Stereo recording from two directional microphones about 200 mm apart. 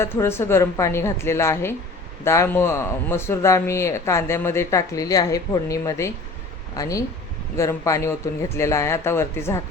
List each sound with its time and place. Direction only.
0.0 s speech: 10° left (ahead or behind)